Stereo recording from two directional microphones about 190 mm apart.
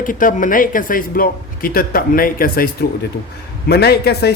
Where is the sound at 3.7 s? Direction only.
55° left (ahead or behind).